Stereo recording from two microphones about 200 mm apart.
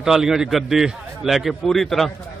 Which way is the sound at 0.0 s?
Centre (ahead or behind).